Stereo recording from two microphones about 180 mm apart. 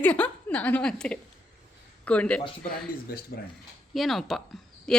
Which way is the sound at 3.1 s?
60° left (ahead or behind).